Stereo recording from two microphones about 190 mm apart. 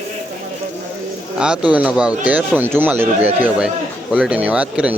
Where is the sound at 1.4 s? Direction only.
5° right (ahead or behind).